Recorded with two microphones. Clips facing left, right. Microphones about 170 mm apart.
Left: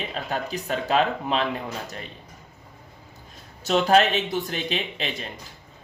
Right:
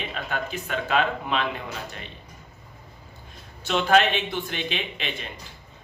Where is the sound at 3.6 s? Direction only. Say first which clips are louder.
Left 2 dB; 40° left (ahead or behind).